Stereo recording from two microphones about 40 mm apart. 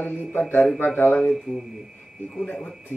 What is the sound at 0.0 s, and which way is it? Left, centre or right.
A man's voice, left.